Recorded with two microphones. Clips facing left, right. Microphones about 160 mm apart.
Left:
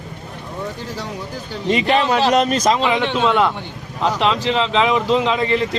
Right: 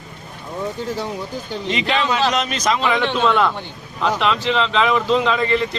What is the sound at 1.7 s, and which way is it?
Speech, 45° left (ahead or behind).